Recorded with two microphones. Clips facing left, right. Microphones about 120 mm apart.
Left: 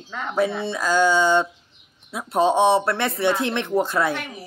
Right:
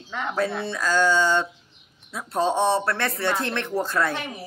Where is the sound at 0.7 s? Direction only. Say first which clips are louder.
Left 1 dB; 20° left (ahead or behind).